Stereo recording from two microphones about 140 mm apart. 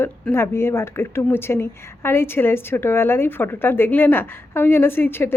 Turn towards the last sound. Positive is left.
turn(degrees=15)  # may be behind; listen again after turning